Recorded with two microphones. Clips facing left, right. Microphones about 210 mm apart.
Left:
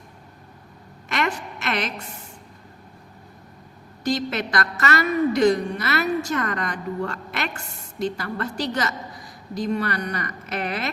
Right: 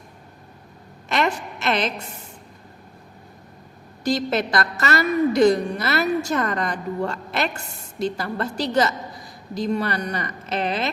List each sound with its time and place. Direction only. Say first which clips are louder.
1.1 s a woman's voice: right 3 dB; 30° right (ahead or behind)
4.0 s a woman's voice: right 2 dB; 35° right (ahead or behind)